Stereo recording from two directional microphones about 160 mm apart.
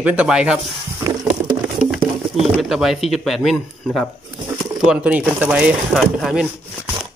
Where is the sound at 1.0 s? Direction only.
20° right (ahead or behind).